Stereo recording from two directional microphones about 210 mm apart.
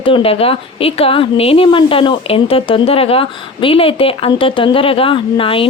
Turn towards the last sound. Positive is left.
turn(degrees=25)  # may be behind; listen again after turning